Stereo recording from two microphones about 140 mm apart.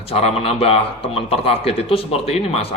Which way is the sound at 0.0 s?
45° left (ahead or behind).